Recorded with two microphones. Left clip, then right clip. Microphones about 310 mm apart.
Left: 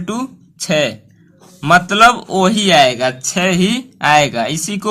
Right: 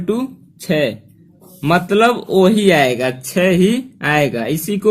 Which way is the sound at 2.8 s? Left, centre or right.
Centre.